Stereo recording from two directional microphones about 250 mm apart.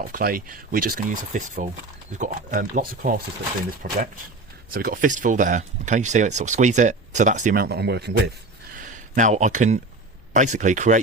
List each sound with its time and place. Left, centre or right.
0.1 s speech: right
8.8 s speech: right